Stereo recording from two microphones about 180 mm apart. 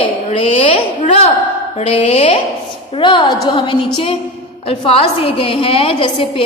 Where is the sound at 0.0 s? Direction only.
30° left (ahead or behind).